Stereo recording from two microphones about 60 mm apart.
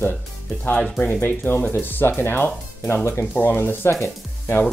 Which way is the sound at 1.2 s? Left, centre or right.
Left.